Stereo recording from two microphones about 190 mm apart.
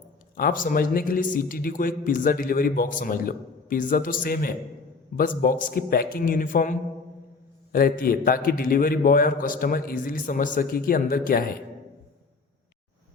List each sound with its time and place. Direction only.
0.3 s a man's voice: 45° left (ahead or behind)